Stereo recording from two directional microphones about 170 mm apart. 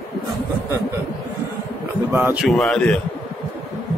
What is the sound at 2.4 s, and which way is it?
Speech, centre (ahead or behind).